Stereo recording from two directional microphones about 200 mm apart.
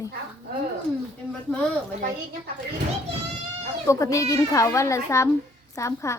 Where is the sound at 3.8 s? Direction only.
15° left (ahead or behind).